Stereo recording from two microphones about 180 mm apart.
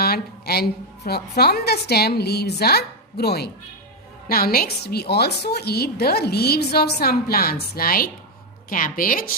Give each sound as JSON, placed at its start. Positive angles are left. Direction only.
{"t": 0.0, "sound": "a woman's voice", "side_deg": 60}